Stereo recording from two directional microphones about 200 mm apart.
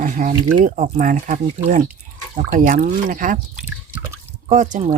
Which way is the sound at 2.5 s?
40° right (ahead or behind).